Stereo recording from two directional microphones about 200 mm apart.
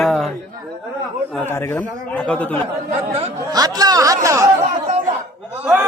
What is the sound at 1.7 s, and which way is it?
Speech, 5° left (ahead or behind).